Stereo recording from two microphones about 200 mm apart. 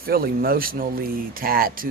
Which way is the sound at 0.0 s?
50° right (ahead or behind).